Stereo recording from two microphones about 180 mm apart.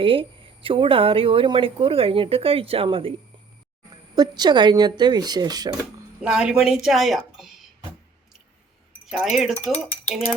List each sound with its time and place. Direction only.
0.0 s speech: 30° right (ahead or behind)
6.2 s a woman's voice: 5° right (ahead or behind)
9.0 s a woman's voice: centre (ahead or behind)